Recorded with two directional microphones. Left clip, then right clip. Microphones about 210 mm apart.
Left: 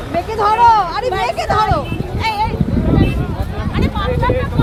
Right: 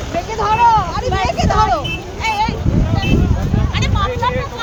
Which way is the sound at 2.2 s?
10° left (ahead or behind).